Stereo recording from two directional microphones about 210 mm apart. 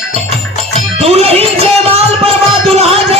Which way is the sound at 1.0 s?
30° right (ahead or behind).